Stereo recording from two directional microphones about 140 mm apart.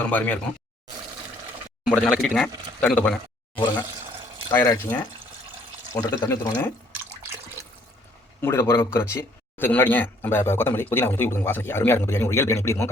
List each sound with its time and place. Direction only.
0.1 s speech: 10° left (ahead or behind)
1.9 s speech: 5° left (ahead or behind)
4.5 s speech: 20° left (ahead or behind)
8.4 s speech: 20° left (ahead or behind)